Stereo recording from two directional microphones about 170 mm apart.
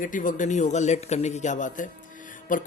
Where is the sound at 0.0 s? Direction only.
50° left (ahead or behind).